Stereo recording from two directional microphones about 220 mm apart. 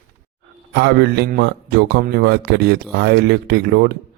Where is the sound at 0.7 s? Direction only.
50° right (ahead or behind).